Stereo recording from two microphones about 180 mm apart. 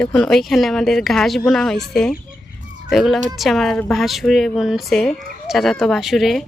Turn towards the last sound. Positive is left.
turn(degrees=0)  # may be behind; listen again after turning